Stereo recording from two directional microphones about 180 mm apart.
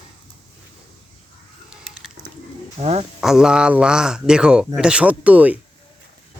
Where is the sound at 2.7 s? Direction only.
35° right (ahead or behind).